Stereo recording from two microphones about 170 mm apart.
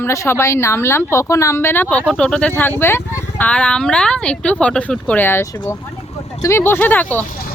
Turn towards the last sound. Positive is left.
turn(degrees=10)  # may be behind; listen again after turning